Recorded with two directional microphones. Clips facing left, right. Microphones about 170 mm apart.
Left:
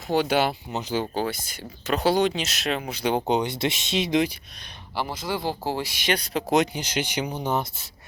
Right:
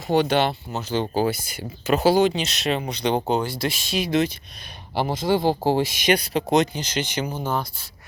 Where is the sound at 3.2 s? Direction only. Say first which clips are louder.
Even; 20° left (ahead or behind).